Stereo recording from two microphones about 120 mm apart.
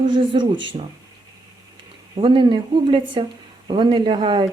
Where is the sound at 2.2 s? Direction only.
45° right (ahead or behind).